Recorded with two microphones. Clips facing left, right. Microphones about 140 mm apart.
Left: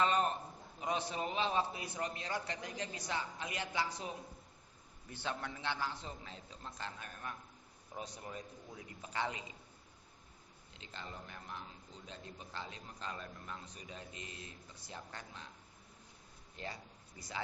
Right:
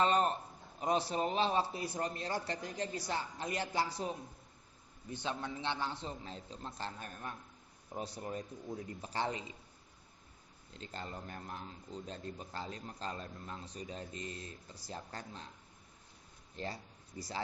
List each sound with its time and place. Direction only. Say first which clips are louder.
0.0 s a sound: right 2 dB; 35° right (ahead or behind)
0.8 s speech: right 5 dB; 35° right (ahead or behind)
5.1 s a man's voice: right 3 dB; 20° right (ahead or behind); by 9.4 s 35° right (ahead or behind)
10.8 s speech: right 4 dB; 40° right (ahead or behind)
16.6 s speech: right 4 dB; 35° right (ahead or behind)